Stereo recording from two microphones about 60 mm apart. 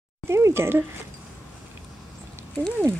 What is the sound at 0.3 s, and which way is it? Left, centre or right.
Speech, right.